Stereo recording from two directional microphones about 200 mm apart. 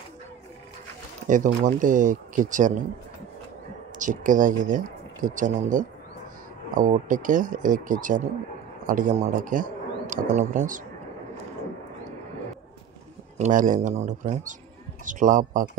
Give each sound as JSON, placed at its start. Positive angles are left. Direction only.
{"t": 1.2, "sound": "speech", "side_deg": -40}
{"t": 4.0, "sound": "a man's voice", "side_deg": -40}
{"t": 13.4, "sound": "speech", "side_deg": -40}